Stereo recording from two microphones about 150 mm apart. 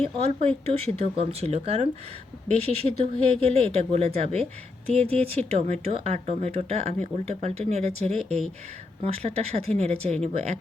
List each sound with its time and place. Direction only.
0.0 s speech: 40° right (ahead or behind)